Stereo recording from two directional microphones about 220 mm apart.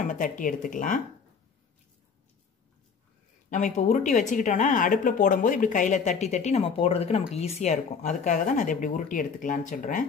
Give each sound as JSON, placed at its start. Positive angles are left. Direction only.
{"t": 0.0, "sound": "a woman's voice", "side_deg": 35}
{"t": 3.4, "sound": "a woman's voice", "side_deg": 35}